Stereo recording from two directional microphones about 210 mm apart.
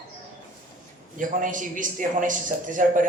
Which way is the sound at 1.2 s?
40° right (ahead or behind).